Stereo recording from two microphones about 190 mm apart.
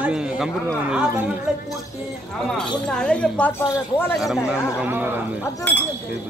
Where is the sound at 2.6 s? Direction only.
5° left (ahead or behind).